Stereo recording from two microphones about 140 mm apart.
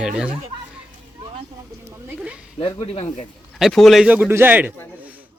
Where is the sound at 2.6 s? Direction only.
30° left (ahead or behind).